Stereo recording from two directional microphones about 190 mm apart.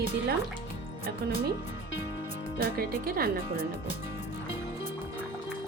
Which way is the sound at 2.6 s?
50° right (ahead or behind).